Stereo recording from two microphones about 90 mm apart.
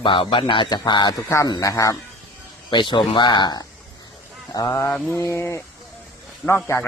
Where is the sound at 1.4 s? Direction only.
45° left (ahead or behind).